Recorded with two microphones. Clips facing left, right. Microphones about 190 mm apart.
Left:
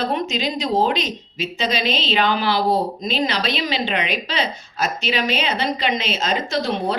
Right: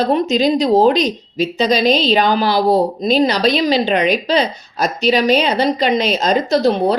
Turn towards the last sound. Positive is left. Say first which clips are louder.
# right 8 dB
turn(degrees=-40)  # may be behind; listen again after turning